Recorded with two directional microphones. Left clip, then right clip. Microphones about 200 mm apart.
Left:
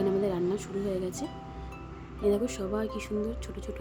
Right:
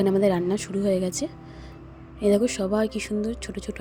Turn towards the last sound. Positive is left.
turn(degrees=-30)  # may be behind; listen again after turning